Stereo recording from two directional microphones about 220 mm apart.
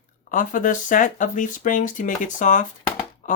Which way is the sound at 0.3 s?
35° left (ahead or behind).